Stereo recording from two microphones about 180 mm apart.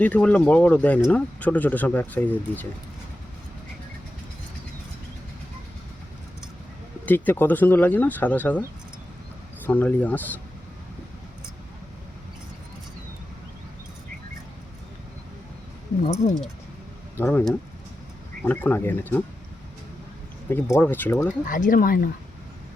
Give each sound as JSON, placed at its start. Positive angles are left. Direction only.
{"t": 0.0, "sound": "speech", "side_deg": 5}
{"t": 7.0, "sound": "speech", "side_deg": 10}
{"t": 9.6, "sound": "speech", "side_deg": 10}
{"t": 17.2, "sound": "speech", "side_deg": 10}
{"t": 20.5, "sound": "speech", "side_deg": 15}
{"t": 21.4, "sound": "speech", "side_deg": 50}